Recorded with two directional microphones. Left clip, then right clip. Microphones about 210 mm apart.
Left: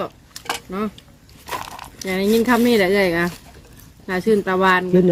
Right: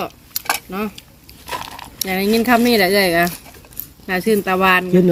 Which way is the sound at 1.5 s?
20° left (ahead or behind).